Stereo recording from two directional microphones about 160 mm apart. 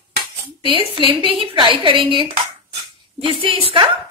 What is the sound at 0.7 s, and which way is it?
Dishes, 35° right (ahead or behind).